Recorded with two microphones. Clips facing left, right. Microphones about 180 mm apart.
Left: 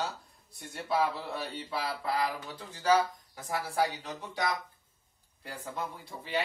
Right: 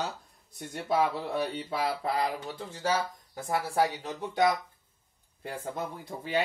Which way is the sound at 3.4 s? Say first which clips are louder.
Right 3 dB; 50° right (ahead or behind).